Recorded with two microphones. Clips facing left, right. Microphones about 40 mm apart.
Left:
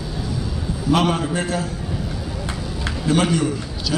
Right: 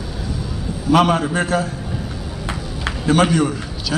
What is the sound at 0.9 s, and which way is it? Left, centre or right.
Speech, right.